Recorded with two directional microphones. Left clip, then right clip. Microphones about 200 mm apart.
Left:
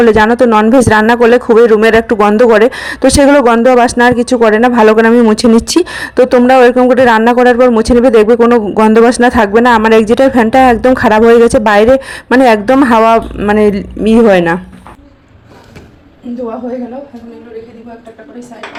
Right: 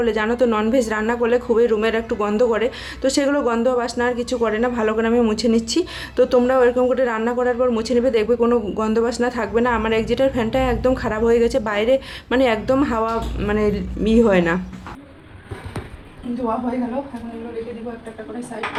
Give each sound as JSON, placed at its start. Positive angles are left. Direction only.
{"t": 0.0, "sound": "speech", "side_deg": 40}
{"t": 8.4, "sound": "speech", "side_deg": 30}
{"t": 9.0, "sound": "speech", "side_deg": 45}